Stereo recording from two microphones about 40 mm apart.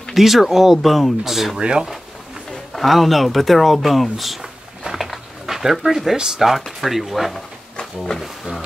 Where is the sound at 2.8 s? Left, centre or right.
Centre.